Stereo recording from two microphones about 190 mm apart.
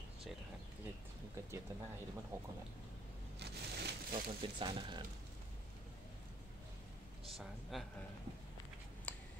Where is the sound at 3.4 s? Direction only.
60° right (ahead or behind).